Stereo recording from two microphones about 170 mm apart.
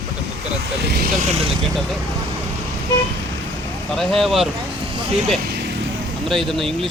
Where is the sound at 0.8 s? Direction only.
75° right (ahead or behind).